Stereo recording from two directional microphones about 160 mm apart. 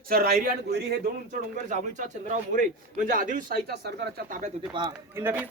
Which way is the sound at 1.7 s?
50° right (ahead or behind).